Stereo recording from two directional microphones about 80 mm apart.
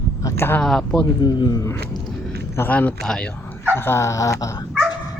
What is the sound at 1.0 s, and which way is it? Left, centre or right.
Speech, left.